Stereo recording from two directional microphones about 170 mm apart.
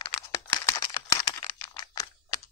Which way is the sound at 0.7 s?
20° left (ahead or behind).